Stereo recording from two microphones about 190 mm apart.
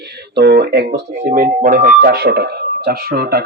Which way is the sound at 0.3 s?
60° right (ahead or behind).